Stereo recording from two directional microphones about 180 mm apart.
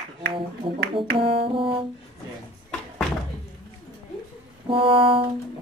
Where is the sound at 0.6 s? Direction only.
30° right (ahead or behind).